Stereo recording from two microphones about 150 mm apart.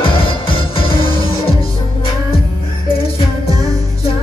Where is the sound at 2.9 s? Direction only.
40° left (ahead or behind).